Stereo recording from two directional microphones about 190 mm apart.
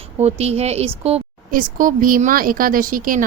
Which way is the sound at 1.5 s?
45° right (ahead or behind).